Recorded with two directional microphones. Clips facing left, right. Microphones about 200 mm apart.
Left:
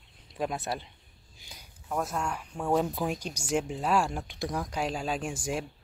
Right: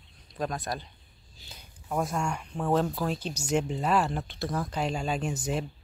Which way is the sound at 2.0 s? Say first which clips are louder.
Right 2 dB; 5° left (ahead or behind).